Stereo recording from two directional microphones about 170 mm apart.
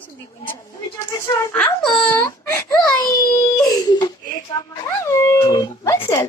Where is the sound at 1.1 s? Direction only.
15° left (ahead or behind).